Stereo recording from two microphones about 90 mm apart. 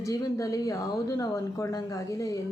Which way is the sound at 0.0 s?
35° left (ahead or behind).